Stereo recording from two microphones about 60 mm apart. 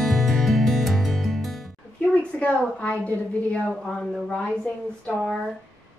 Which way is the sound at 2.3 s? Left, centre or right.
Left.